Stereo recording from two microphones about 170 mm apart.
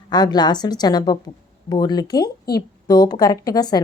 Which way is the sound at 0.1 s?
25° left (ahead or behind).